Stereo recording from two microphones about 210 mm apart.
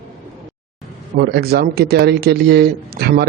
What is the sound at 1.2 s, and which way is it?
A man's voice, 50° right (ahead or behind).